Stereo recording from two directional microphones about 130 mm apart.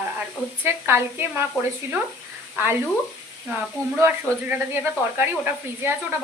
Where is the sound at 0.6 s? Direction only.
20° right (ahead or behind).